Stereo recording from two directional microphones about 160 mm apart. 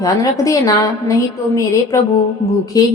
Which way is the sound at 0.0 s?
20° left (ahead or behind).